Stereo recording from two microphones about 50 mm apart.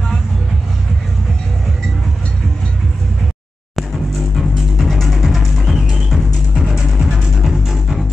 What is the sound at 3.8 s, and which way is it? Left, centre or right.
Music, centre.